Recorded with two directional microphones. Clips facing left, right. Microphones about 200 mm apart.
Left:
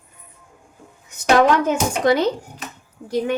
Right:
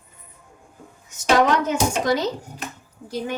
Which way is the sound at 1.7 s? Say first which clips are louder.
Left 3 dB; 60° left (ahead or behind).